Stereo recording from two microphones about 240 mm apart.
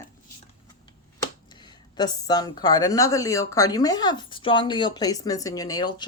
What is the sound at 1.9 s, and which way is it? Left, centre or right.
A woman's voice, centre.